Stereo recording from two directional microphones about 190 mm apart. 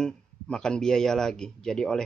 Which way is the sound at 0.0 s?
5° left (ahead or behind).